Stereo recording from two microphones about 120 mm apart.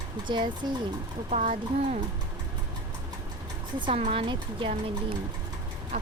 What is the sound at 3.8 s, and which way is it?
Speech, 55° right (ahead or behind).